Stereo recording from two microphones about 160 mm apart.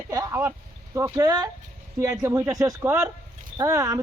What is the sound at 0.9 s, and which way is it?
A man's voice, 20° right (ahead or behind).